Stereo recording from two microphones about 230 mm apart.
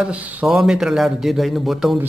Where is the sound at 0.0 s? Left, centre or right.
Centre.